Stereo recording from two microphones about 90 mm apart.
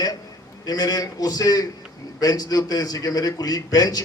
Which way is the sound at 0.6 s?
45° left (ahead or behind).